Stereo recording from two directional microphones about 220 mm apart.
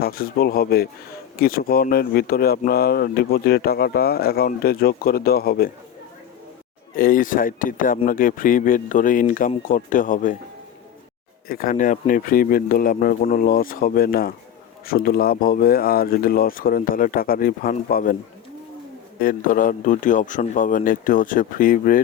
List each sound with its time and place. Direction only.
0.0 s speech: 45° left (ahead or behind)
6.9 s speech: 40° left (ahead or behind)
11.4 s speech: 40° left (ahead or behind)
19.2 s speech: 40° left (ahead or behind)